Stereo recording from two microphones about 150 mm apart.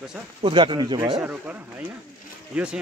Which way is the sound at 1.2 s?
10° right (ahead or behind).